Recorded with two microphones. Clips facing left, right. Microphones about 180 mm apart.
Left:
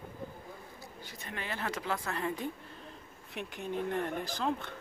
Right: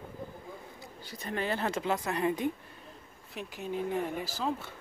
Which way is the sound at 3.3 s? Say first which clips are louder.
Right 1 dB; centre (ahead or behind).